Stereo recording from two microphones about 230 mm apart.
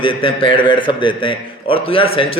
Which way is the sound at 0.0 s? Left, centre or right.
Left.